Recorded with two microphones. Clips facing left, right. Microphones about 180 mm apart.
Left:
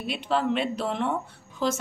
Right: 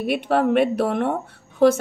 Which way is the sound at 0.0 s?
60° right (ahead or behind).